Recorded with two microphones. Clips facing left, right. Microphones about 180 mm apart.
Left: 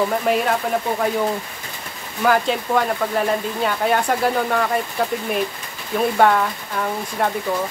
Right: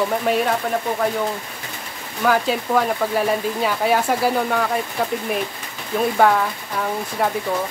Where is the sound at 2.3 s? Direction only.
Centre (ahead or behind).